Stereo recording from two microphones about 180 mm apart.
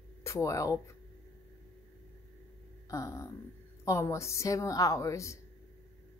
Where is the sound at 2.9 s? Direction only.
15° left (ahead or behind).